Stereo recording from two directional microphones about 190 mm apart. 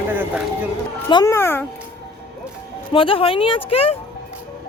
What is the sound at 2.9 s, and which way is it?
Speech, 30° left (ahead or behind).